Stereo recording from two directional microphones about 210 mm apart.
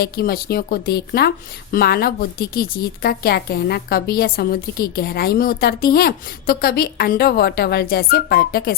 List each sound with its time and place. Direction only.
0.0 s a woman's voice: 45° left (ahead or behind)